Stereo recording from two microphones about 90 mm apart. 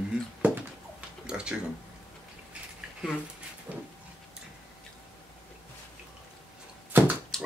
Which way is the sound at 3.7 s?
15° right (ahead or behind).